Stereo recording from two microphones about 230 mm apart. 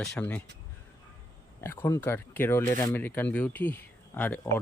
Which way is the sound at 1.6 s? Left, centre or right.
Centre.